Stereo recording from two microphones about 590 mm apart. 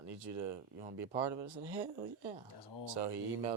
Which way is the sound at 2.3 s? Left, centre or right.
Right.